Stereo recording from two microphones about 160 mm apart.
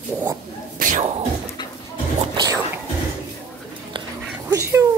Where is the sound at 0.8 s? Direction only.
55° right (ahead or behind).